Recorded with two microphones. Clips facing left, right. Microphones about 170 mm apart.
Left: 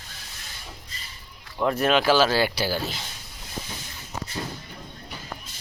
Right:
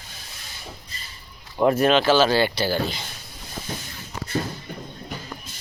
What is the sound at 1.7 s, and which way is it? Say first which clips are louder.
Speech: right 1 dB; centre (ahead or behind).